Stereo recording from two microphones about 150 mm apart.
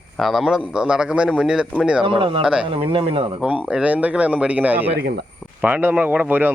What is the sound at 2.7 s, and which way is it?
Speech, 35° right (ahead or behind).